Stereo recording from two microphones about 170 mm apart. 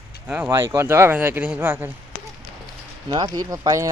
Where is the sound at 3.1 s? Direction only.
30° right (ahead or behind).